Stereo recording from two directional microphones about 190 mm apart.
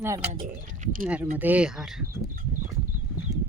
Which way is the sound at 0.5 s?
45° right (ahead or behind).